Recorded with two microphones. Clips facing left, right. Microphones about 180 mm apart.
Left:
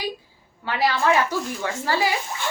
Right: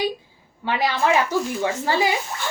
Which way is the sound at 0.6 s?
20° right (ahead or behind).